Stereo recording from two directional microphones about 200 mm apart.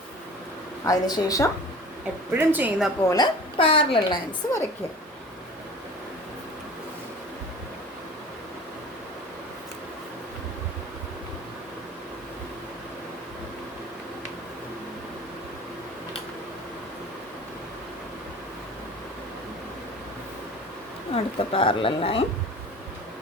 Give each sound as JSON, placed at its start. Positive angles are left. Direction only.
{"t": 0.9, "sound": "a woman's voice", "side_deg": 20}
{"t": 2.3, "sound": "a woman's voice", "side_deg": -10}
{"t": 3.1, "sound": "a woman's voice", "side_deg": 25}
{"t": 21.3, "sound": "a woman's voice", "side_deg": 25}